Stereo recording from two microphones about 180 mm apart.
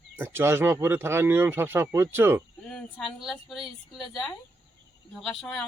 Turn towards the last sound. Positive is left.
turn(degrees=0)  # may be behind; listen again after turning